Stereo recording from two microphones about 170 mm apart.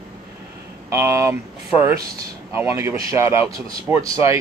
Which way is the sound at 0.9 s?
15° right (ahead or behind).